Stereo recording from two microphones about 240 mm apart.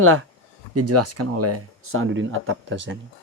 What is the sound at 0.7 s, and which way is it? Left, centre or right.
A man's voice, right.